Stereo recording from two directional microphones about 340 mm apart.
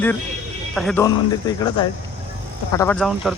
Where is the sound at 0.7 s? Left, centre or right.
Centre.